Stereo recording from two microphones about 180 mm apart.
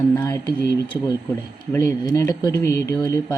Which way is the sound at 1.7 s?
20° left (ahead or behind).